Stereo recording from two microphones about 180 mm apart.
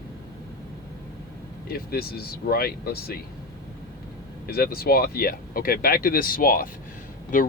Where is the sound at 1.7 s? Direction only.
55° left (ahead or behind).